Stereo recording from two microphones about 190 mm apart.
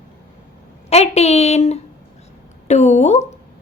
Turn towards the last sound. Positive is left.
turn(degrees=35)  # may be behind; listen again after turning